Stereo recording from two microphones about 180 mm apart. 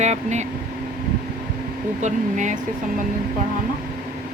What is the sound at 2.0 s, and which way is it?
Speech, 45° right (ahead or behind).